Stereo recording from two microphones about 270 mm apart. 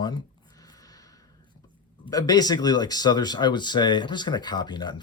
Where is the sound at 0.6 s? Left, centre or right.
Centre.